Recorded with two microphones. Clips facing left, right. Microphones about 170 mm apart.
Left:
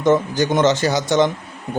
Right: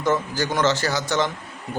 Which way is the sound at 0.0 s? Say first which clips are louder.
Left 6 dB; 20° left (ahead or behind).